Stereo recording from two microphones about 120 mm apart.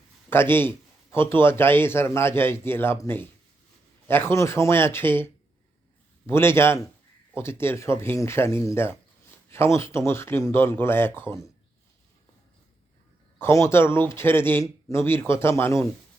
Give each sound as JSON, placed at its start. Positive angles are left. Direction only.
{"t": 0.3, "sound": "speech", "side_deg": 20}
{"t": 13.4, "sound": "speech", "side_deg": 25}